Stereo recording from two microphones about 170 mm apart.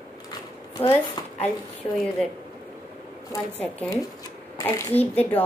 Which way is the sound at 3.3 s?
15° left (ahead or behind).